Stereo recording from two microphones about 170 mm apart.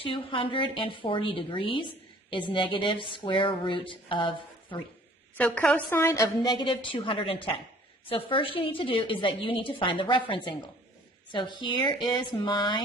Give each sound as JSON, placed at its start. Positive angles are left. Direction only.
{"t": 0.0, "sound": "a woman's voice", "side_deg": 30}
{"t": 5.4, "sound": "a woman's voice", "side_deg": 10}